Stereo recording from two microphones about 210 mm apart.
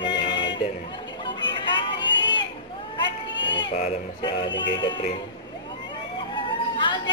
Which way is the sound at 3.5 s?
25° left (ahead or behind).